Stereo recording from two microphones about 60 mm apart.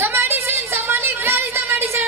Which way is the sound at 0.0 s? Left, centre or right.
Right.